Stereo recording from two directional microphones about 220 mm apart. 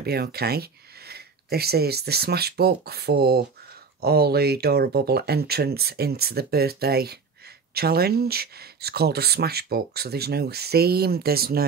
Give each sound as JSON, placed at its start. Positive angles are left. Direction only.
{"t": 0.0, "sound": "speech", "side_deg": -45}